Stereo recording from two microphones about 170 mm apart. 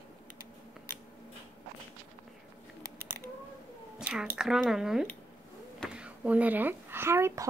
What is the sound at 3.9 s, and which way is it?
A woman's voice, 5° right (ahead or behind).